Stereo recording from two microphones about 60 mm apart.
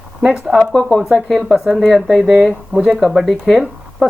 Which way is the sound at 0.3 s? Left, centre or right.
Centre.